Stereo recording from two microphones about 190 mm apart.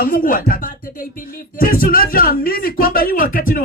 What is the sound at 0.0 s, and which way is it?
Speech, 50° left (ahead or behind).